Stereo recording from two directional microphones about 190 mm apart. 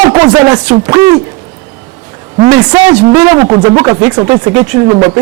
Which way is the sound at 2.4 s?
20° right (ahead or behind).